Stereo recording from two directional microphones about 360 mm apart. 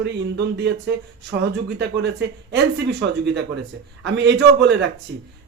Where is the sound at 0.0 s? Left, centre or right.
Right.